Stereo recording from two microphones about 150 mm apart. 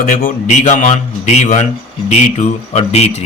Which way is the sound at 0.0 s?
65° left (ahead or behind).